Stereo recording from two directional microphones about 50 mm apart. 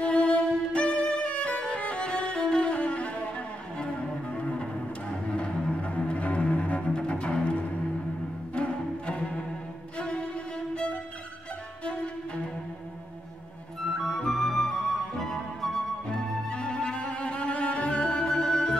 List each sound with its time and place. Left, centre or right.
0.0 s violin: left
4.4 s cello: left
5.1 s music: centre
8.5 s music: left
9.9 s cello: left
13.9 s flute: centre
16.1 s music: centre